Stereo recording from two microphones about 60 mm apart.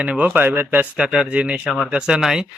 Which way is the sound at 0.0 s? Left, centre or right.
Right.